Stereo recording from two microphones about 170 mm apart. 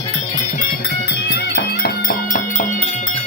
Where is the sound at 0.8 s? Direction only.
75° left (ahead or behind); by 3.2 s 40° left (ahead or behind).